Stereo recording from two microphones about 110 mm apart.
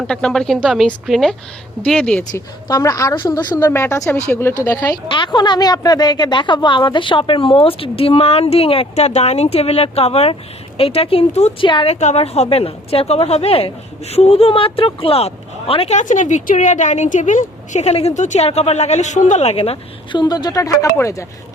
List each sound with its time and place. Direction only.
0.1 s speech: 5° left (ahead or behind)
2.3 s a woman's voice: 35° left (ahead or behind)
3.7 s speech: 20° left (ahead or behind)
5.0 s a woman's voice: 45° left (ahead or behind); by 11.5 s 65° left (ahead or behind)
11.6 s a woman's voice: 50° left (ahead or behind)
11.9 s a woman's voice: 80° left; by 19.8 s 60° left (ahead or behind)
20.1 s a woman's voice: 40° left (ahead or behind)